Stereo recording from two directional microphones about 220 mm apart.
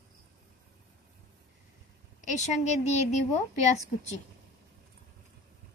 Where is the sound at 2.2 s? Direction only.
30° left (ahead or behind).